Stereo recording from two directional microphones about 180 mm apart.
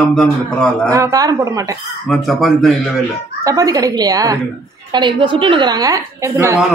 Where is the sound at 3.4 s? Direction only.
20° right (ahead or behind).